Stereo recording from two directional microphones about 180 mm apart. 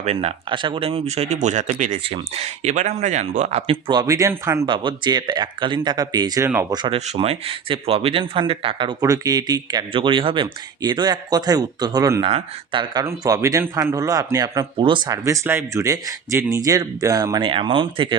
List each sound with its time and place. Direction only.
0.0 s speech: 35° right (ahead or behind); by 4.6 s 15° right (ahead or behind)
4.6 s speech: 25° right (ahead or behind)
6.7 s speech: 25° right (ahead or behind)